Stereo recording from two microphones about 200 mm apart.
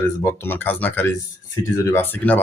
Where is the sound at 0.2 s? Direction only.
15° left (ahead or behind).